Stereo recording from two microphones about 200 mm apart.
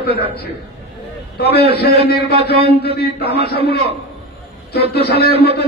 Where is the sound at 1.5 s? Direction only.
55° left (ahead or behind).